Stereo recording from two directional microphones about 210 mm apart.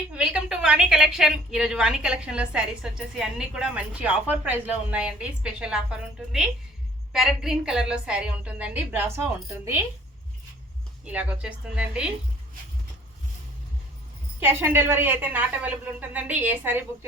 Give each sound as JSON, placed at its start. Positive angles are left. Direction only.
{"t": 0.1, "sound": "a woman's voice", "side_deg": -5}
{"t": 11.0, "sound": "a woman's voice", "side_deg": -5}
{"t": 14.3, "sound": "a woman's voice", "side_deg": -10}